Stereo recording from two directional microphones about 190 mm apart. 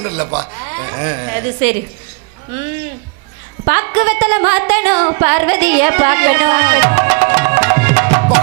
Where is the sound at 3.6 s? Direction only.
20° right (ahead or behind).